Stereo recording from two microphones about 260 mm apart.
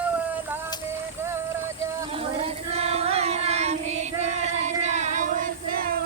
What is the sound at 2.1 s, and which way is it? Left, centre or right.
Child singing, right.